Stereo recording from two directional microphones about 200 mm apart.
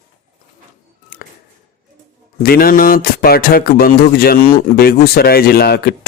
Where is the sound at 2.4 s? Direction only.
50° left (ahead or behind).